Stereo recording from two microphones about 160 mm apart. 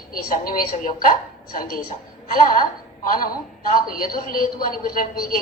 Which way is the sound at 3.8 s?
65° left (ahead or behind).